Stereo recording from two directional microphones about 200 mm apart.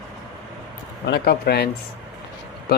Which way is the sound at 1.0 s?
55° left (ahead or behind).